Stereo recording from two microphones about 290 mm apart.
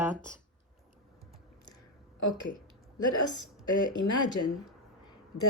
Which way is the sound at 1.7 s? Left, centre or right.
Left.